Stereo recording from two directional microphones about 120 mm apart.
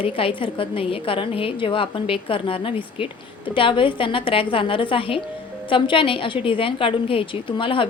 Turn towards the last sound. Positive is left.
turn(degrees=45)  # may be behind; listen again after turning